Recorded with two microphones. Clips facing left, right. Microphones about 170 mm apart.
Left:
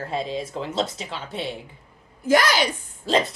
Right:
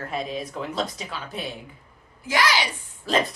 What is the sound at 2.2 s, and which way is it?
Speech, 50° left (ahead or behind).